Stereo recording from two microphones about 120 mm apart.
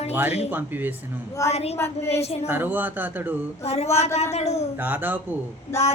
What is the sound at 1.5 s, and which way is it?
Speech, 60° left (ahead or behind).